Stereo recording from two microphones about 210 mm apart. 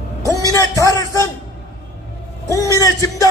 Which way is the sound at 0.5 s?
15° left (ahead or behind).